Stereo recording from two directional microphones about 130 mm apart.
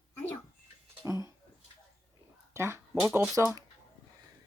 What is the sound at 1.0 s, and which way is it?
Speech, 25° right (ahead or behind).